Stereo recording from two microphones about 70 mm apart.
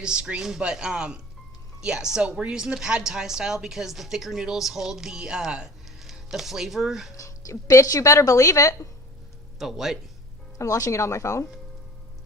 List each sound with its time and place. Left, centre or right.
0.0 s a woman's voice: centre
7.2 s speech: left
9.6 s speech: centre
10.6 s speech: left